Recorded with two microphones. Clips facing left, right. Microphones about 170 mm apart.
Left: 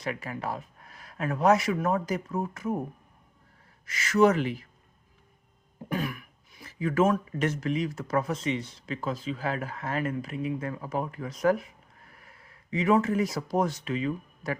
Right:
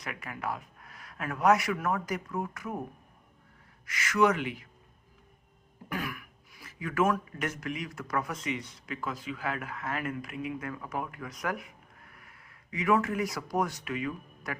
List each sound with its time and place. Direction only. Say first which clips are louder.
0.0 s speech: left 4 dB; 30° left (ahead or behind)
3.8 s speech: left 4 dB; 30° left (ahead or behind)
5.9 s speech: left 5 dB; 25° left (ahead or behind)